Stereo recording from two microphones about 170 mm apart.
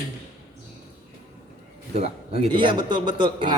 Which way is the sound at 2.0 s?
30° right (ahead or behind).